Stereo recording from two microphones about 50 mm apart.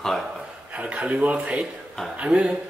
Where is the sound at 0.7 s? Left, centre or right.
Right.